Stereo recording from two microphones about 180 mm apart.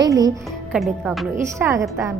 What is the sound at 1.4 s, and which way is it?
Speech, 15° right (ahead or behind).